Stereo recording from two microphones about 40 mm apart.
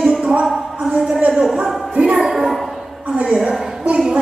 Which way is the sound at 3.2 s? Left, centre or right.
Centre.